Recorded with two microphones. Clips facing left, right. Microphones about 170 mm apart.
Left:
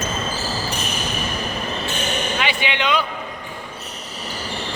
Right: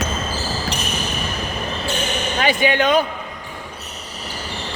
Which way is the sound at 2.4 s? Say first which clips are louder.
Right 11 dB; 45° right (ahead or behind).